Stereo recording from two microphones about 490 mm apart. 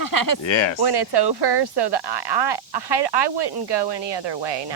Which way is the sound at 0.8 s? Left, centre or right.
Right.